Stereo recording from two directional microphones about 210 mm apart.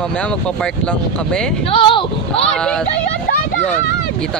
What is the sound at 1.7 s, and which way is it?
Speech, 25° left (ahead or behind).